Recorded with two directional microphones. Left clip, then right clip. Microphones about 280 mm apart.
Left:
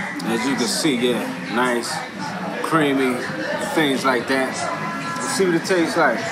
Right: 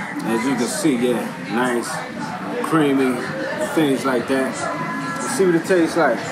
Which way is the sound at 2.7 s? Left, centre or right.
Centre.